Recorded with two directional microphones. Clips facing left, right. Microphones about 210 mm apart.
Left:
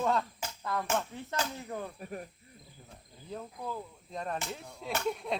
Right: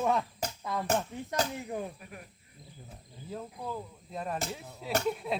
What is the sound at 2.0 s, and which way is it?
Speech, 40° left (ahead or behind).